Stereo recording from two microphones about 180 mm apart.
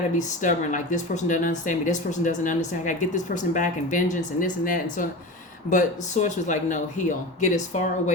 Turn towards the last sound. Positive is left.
turn(degrees=40)  # may be behind; listen again after turning